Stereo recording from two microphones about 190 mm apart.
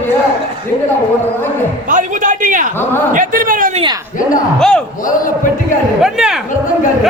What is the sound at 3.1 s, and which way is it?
Speech, 45° right (ahead or behind).